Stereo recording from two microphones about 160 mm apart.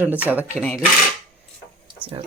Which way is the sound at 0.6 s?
5° left (ahead or behind).